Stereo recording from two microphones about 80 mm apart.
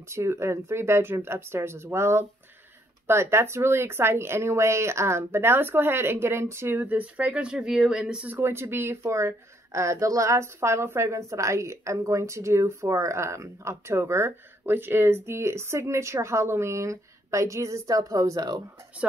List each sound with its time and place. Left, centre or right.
0.1 s speech: right; by 8.3 s centre
8.3 s speech: right